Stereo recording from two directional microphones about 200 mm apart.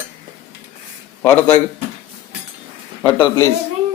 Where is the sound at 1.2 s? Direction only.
10° left (ahead or behind).